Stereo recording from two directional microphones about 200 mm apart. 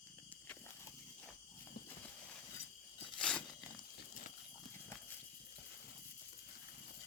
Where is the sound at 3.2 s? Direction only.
5° left (ahead or behind).